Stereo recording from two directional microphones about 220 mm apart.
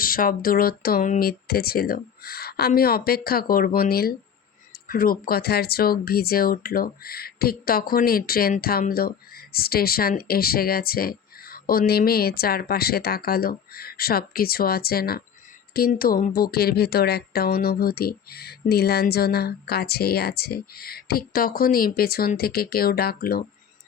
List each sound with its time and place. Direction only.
0.0 s speech: 40° left (ahead or behind)